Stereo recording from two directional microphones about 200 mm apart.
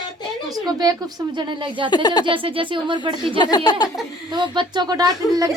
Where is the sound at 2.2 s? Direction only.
25° right (ahead or behind).